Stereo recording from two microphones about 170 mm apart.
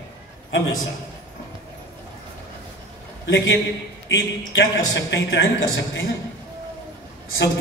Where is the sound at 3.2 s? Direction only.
90° left.